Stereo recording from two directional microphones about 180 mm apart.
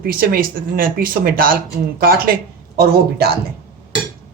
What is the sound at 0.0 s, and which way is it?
A woman's voice, 55° right (ahead or behind).